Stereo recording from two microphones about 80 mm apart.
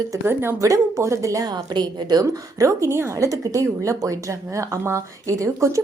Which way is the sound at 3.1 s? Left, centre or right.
Right.